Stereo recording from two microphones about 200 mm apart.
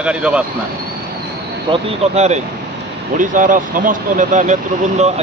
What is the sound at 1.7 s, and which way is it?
A man's voice, 35° right (ahead or behind).